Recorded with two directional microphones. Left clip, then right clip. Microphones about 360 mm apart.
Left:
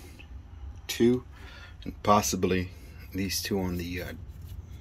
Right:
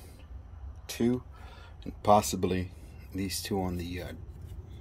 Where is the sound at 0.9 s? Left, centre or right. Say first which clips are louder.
Left 6 dB; centre.